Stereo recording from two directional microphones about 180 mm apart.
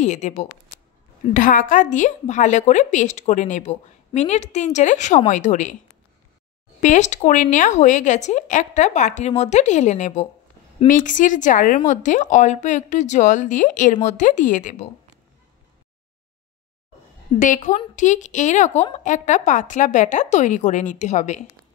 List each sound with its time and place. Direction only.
0.0 s a woman's voice: 40° left (ahead or behind)
6.8 s a woman's voice: 40° left (ahead or behind)
17.4 s a woman's voice: 45° left (ahead or behind)